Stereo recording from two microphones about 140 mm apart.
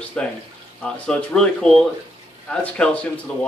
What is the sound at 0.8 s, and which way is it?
Speech, 5° left (ahead or behind).